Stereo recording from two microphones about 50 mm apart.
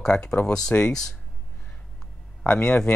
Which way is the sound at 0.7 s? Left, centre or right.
Left.